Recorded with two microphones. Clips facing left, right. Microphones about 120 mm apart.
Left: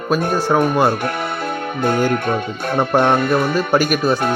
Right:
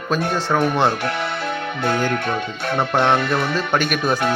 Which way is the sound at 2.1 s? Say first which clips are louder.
Left 3 dB; 40° left (ahead or behind).